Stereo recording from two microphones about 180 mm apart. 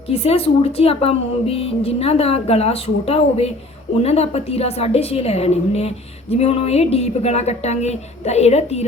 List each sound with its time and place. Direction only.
0.1 s speech: 35° left (ahead or behind)